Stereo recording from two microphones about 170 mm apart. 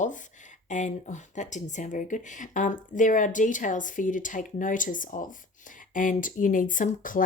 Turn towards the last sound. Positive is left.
turn(degrees=50)  # may be behind; listen again after turning